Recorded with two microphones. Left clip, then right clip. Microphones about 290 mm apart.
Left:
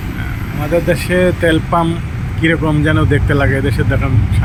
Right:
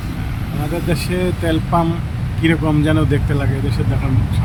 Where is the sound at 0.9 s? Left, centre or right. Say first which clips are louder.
Left 6 dB; centre.